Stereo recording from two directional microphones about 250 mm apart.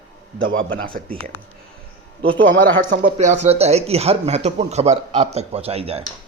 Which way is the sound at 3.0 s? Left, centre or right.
Right.